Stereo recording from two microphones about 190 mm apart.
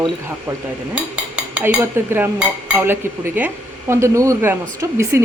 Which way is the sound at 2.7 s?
10° right (ahead or behind).